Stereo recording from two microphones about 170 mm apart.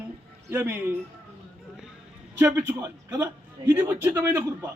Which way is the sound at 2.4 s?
15° right (ahead or behind).